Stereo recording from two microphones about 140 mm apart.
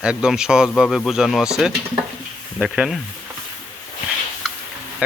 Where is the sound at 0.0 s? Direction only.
5° right (ahead or behind).